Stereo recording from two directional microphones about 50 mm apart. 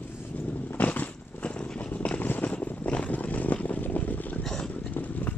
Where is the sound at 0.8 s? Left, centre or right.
Left.